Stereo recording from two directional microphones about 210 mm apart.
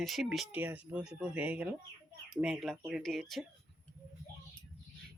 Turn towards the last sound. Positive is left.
turn(degrees=0)  # may be behind; listen again after turning